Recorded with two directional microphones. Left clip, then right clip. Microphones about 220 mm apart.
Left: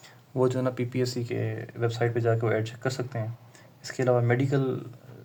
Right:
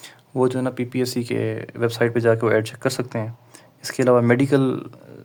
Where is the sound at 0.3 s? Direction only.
25° right (ahead or behind).